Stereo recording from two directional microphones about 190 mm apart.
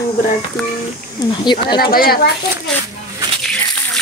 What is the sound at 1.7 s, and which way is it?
Speech, 55° left (ahead or behind).